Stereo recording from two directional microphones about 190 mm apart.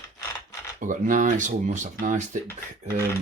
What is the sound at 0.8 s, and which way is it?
Speech, 45° right (ahead or behind).